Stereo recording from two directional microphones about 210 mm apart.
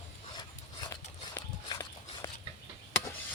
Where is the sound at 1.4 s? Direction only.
15° left (ahead or behind).